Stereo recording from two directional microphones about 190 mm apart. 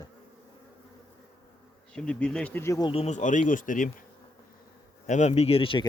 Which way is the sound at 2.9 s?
35° left (ahead or behind).